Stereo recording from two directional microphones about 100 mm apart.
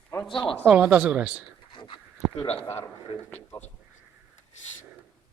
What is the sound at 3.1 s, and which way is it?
Speech, 75° left (ahead or behind).